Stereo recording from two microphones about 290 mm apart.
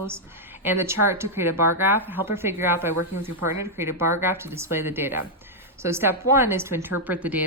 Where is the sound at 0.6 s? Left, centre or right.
Centre.